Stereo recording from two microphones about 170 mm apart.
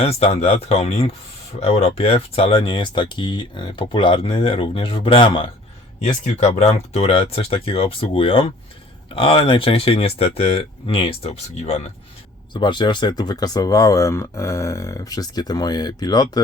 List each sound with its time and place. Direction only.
0.0 s speech: 35° left (ahead or behind)
12.5 s speech: 25° left (ahead or behind)